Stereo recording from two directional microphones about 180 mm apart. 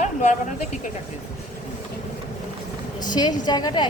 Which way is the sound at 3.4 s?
20° left (ahead or behind).